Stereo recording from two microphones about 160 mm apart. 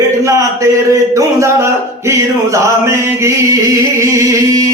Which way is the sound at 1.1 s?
20° right (ahead or behind).